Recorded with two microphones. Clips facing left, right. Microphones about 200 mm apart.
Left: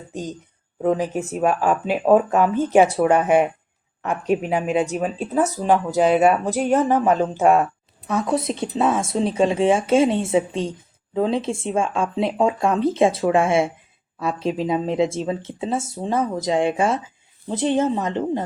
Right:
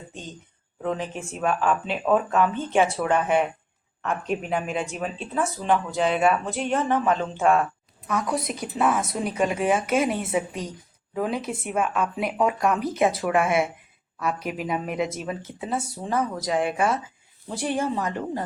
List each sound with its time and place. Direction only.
0.1 s speech: 40° left (ahead or behind)
4.0 s speech: 5° left (ahead or behind)
4.8 s speech: 35° left (ahead or behind)
8.0 s speech: 25° left (ahead or behind)